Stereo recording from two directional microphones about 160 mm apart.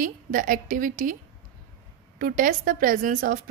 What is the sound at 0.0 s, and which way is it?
Speech, 60° right (ahead or behind).